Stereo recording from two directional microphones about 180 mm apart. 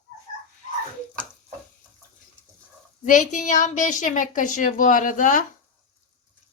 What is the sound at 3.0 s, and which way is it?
A woman's voice, 45° left (ahead or behind).